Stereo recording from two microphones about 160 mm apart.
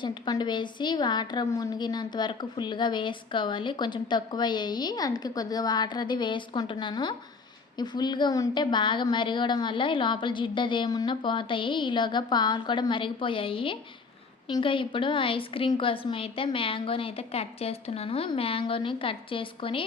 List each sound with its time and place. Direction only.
0.0 s a woman's voice: 25° left (ahead or behind)